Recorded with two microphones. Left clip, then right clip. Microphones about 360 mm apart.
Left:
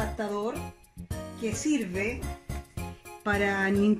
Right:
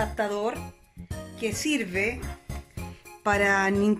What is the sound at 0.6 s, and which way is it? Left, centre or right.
Music, centre.